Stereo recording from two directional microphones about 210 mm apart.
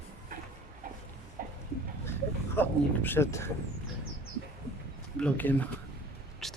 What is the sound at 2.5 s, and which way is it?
Speech, 10° left (ahead or behind).